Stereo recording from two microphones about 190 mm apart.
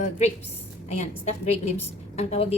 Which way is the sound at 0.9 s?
35° left (ahead or behind).